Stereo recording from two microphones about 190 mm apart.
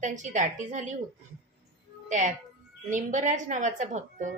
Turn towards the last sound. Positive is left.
turn(degrees=-40)  # may be behind; listen again after turning